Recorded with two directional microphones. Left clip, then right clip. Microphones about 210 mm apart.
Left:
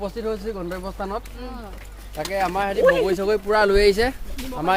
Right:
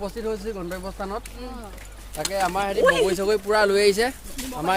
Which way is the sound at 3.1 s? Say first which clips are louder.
Left 1 dB; 5° right (ahead or behind).